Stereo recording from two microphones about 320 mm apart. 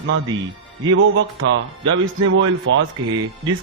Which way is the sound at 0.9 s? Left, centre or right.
Right.